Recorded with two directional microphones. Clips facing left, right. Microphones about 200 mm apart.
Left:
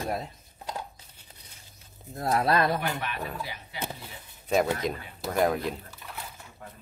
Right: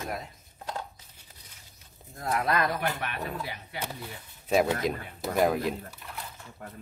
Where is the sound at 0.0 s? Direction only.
30° left (ahead or behind).